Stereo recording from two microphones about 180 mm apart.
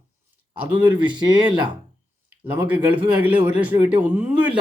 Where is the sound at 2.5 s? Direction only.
10° right (ahead or behind).